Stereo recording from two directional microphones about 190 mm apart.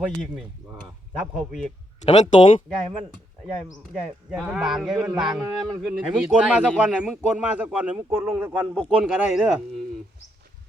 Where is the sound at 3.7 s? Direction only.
Centre (ahead or behind).